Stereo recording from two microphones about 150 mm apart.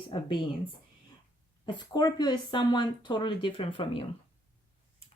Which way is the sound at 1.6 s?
30° left (ahead or behind).